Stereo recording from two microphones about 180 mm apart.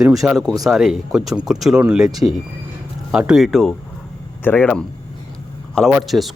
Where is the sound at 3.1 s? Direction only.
5° right (ahead or behind).